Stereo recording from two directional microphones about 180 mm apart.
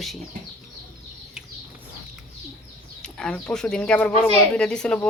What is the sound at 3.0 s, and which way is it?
Speech, 5° left (ahead or behind).